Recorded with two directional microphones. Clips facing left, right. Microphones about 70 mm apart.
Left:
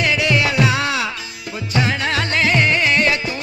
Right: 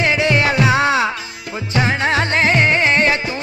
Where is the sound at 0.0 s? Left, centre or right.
Right.